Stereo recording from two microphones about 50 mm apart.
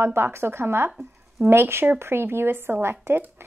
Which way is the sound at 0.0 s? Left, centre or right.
Right.